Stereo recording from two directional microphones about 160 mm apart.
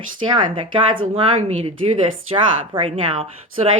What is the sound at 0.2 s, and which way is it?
Speech, 30° right (ahead or behind).